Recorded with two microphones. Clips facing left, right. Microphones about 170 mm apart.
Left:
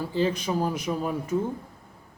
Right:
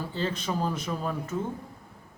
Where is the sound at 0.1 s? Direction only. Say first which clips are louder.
Left 6 dB; 10° left (ahead or behind).